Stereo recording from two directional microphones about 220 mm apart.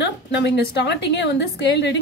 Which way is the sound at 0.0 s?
50° left (ahead or behind).